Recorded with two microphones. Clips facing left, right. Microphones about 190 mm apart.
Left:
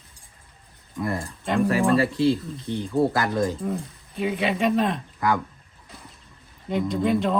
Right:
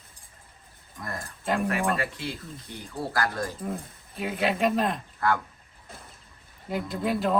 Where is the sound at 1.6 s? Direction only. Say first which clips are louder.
Left 7 dB; 30° left (ahead or behind).